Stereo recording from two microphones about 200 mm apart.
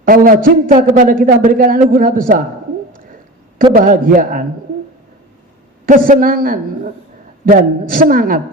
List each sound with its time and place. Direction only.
0.0 s a man's voice: 45° right (ahead or behind)
3.8 s a man's voice: 45° right (ahead or behind)
5.8 s a man's voice: 45° right (ahead or behind)